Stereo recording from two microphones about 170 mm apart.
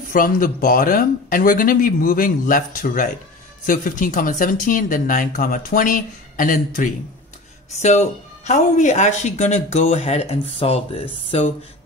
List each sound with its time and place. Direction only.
0.1 s speech: 55° left (ahead or behind); by 11.5 s 35° left (ahead or behind)